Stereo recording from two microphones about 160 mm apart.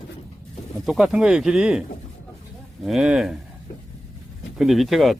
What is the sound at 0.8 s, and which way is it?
Speech, centre (ahead or behind).